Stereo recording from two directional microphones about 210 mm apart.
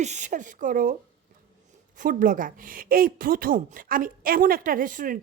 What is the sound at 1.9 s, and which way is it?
A woman's voice, 40° right (ahead or behind).